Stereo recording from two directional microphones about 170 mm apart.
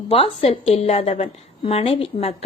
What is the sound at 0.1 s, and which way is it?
A woman's voice, 35° left (ahead or behind).